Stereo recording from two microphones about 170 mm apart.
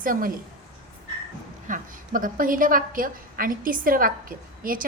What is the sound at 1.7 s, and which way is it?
A woman's voice, 55° right (ahead or behind).